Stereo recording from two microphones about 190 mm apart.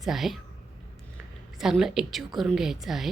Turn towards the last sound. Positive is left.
turn(degrees=0)  # may be behind; listen again after turning